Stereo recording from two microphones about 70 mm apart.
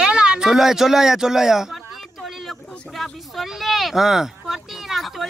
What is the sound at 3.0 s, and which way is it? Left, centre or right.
Speech, centre.